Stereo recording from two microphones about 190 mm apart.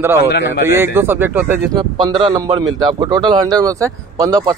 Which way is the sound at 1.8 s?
20° right (ahead or behind).